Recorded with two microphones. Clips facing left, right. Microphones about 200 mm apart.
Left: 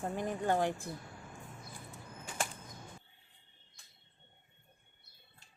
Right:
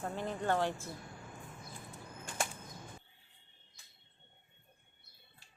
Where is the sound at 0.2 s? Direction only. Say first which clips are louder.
Left 1 dB; 15° left (ahead or behind).